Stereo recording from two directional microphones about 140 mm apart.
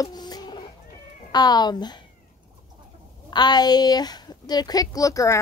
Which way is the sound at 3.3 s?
30° left (ahead or behind).